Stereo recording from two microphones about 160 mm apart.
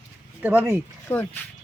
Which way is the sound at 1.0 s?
15° left (ahead or behind).